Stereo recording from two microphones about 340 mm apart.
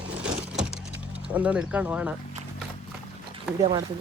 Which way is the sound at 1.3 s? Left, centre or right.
Centre.